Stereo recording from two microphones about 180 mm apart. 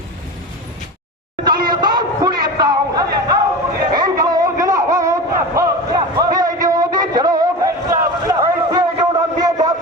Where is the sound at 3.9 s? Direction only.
20° right (ahead or behind).